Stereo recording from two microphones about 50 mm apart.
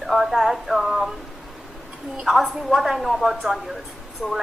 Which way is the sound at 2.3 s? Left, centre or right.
Centre.